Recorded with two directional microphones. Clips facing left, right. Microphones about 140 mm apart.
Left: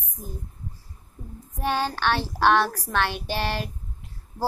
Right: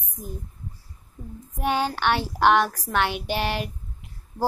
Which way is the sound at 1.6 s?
15° right (ahead or behind).